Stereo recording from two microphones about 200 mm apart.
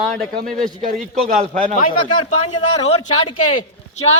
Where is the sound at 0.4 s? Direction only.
45° right (ahead or behind).